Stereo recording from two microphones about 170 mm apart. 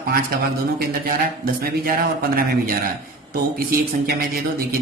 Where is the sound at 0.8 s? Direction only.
60° right (ahead or behind).